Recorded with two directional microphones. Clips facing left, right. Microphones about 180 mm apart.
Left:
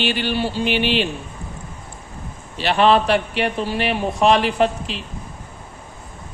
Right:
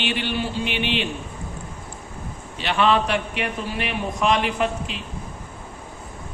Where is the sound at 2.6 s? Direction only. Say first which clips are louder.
Left 4 dB; 35° left (ahead or behind).